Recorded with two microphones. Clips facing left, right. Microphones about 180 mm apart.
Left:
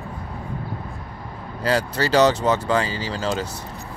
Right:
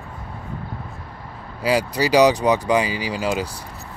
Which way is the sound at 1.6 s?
10° right (ahead or behind).